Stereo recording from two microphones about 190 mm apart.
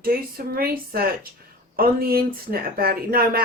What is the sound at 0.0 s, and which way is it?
Speech, 50° right (ahead or behind).